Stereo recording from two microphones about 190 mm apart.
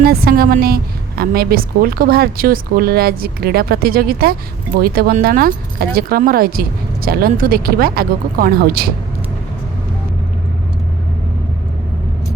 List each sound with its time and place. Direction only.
0.0 s a woman's voice: 55° right (ahead or behind)